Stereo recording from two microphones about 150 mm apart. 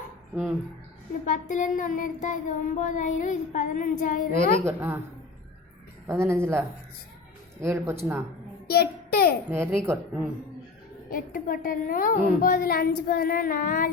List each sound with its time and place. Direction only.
1.2 s child singing: 60° left (ahead or behind)
4.6 s speech: 15° right (ahead or behind)
6.1 s speech: 15° right (ahead or behind)
8.6 s a child's voice: 90° left
9.5 s speech: 15° right (ahead or behind)
11.1 s a woman's voice: 70° left (ahead or behind)